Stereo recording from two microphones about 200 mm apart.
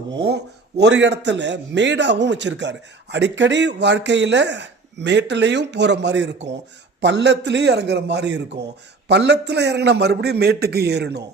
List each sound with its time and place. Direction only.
0.3 s a man's voice: 60° right (ahead or behind)